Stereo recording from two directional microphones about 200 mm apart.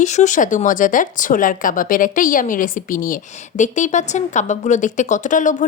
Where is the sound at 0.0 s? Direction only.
35° left (ahead or behind).